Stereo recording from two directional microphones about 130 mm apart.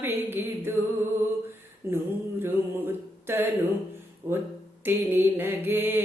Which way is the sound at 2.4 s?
20° right (ahead or behind).